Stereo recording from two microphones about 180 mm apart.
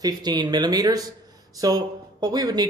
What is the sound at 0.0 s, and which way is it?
Speech, 20° right (ahead or behind).